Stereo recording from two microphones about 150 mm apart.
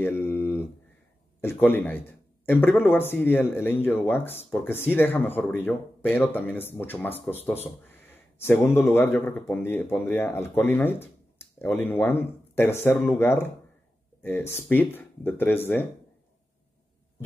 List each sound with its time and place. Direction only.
0.0 s mantra: 15° left (ahead or behind)
1.4 s a man's voice: 15° left (ahead or behind)